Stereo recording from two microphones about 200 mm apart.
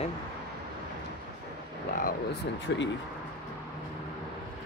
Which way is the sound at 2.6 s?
65° left (ahead or behind).